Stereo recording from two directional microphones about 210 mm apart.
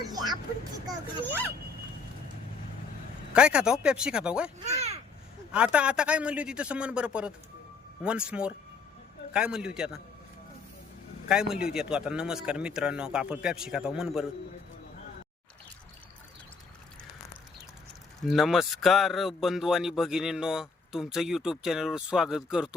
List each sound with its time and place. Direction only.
0.1 s vehicle: 20° right (ahead or behind)
0.9 s speech: 10° left (ahead or behind)
3.3 s speech: 5° right (ahead or behind)
4.6 s a child's voice: 30° right (ahead or behind)
5.5 s speech: 5° right (ahead or behind)
11.3 s speech: 5° right (ahead or behind)
18.2 s speech: centre (ahead or behind)